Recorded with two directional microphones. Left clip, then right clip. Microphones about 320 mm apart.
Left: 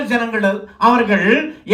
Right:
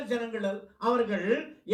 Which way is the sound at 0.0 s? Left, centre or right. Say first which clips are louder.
Left 14 dB; left.